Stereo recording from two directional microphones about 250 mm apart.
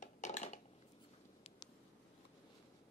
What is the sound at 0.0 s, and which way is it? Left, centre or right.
Dishes, left.